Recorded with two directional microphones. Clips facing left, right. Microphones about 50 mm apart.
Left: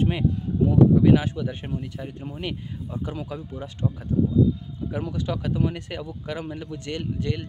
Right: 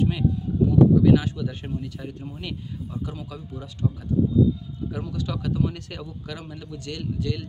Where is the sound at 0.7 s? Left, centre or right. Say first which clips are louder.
Even; left.